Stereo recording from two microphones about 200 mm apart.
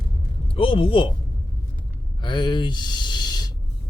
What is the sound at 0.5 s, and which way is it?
Speech, 25° left (ahead or behind).